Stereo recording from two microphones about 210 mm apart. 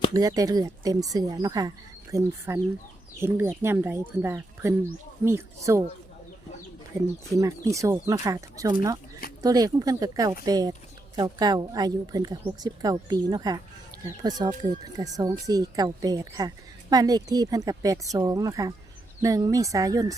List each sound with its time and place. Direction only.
0.1 s speech: 15° right (ahead or behind)
7.3 s speech: 15° right (ahead or behind)